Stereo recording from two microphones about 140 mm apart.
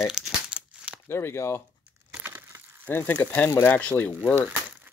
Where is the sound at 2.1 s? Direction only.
15° right (ahead or behind).